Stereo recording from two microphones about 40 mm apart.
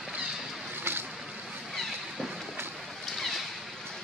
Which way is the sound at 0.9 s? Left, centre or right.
Right.